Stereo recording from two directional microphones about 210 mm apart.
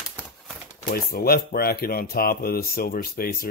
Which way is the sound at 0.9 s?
45° left (ahead or behind).